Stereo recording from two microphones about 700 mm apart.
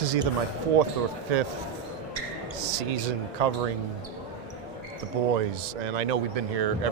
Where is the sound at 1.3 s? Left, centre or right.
Right.